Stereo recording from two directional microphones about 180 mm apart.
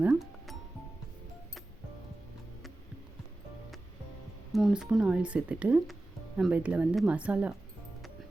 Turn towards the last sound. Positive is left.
turn(degrees=-10)  # may be behind; listen again after turning